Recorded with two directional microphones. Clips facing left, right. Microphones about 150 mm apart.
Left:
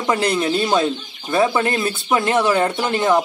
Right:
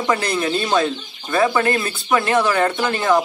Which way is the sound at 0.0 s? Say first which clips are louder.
Left 1 dB; 20° left (ahead or behind).